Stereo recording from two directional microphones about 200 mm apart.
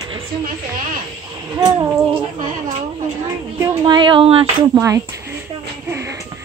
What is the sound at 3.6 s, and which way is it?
Speech, 25° right (ahead or behind).